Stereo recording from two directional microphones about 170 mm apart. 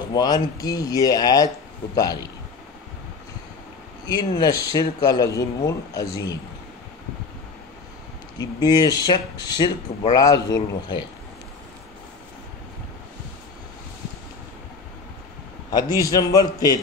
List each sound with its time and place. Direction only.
0.1 s speech: 20° left (ahead or behind)
4.1 s speech: 25° left (ahead or behind)
8.4 s speech: 25° left (ahead or behind)
15.7 s speech: 20° left (ahead or behind)